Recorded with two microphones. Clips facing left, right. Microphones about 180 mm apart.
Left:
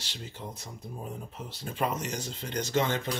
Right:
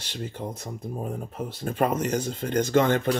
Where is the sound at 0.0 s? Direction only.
55° right (ahead or behind).